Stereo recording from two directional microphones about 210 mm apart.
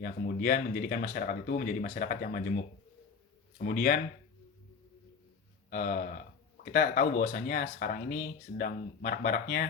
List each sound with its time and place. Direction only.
0.0 s speech: 45° left (ahead or behind)
3.6 s speech: 45° left (ahead or behind)
5.7 s speech: 45° left (ahead or behind)